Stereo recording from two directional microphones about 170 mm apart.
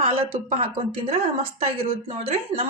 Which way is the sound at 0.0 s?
35° right (ahead or behind).